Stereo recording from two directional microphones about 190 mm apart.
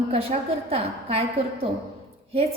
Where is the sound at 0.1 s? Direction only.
30° right (ahead or behind).